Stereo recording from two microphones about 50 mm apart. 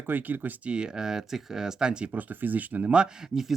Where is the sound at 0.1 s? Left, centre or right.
Right.